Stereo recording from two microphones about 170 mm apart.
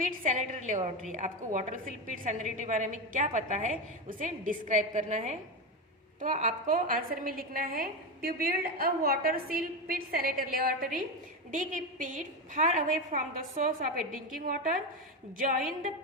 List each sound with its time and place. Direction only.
0.0 s a woman's voice: 50° right (ahead or behind)